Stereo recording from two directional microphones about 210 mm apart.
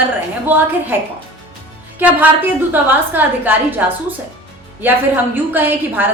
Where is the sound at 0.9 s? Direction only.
10° right (ahead or behind).